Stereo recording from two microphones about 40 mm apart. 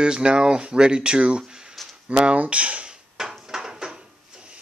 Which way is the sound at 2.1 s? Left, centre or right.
Right.